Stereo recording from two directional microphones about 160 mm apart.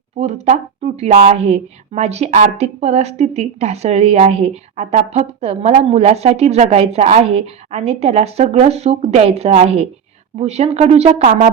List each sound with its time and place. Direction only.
0.2 s a woman's voice: 45° right (ahead or behind)